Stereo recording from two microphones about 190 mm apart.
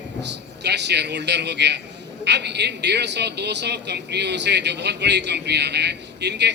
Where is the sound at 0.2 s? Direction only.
65° right (ahead or behind).